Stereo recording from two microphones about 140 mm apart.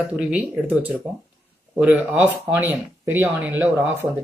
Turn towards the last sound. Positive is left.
turn(degrees=-20)  # may be behind; listen again after turning